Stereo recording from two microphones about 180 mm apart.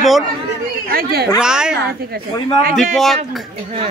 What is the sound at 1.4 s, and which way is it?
Speech, 5° right (ahead or behind).